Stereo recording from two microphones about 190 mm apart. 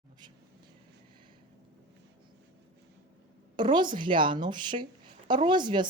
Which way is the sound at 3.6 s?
25° right (ahead or behind).